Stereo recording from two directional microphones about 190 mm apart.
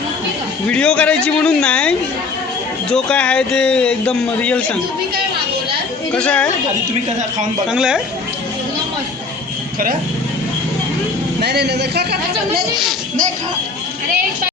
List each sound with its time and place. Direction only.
0.7 s a man's voice: 5° left (ahead or behind)
6.1 s a man's voice: 5° left (ahead or behind)
7.7 s a man's voice: 5° right (ahead or behind)
11.4 s speech: 60° right (ahead or behind)